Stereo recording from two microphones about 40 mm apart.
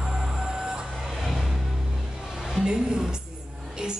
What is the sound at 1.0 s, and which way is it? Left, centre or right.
Music, centre.